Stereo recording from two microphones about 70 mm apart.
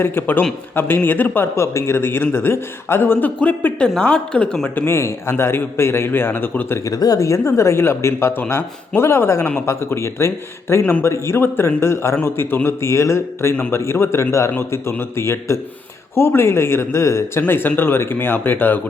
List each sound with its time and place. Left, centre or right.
0.0 s speech: left
1.5 s a woman's voice: left; by 4.4 s centre
4.9 s speech: left
6.8 s speech: left
17.4 s speech: left